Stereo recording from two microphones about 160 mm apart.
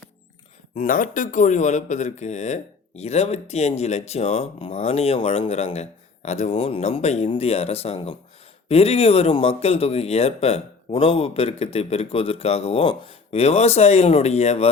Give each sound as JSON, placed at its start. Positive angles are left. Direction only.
{"t": 0.8, "sound": "speech", "side_deg": 55}